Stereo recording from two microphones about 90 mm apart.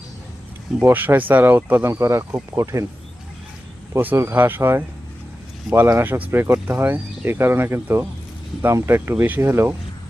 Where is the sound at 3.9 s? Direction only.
25° right (ahead or behind).